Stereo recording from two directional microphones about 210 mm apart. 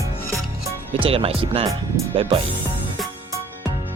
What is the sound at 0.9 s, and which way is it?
Speech, 25° right (ahead or behind).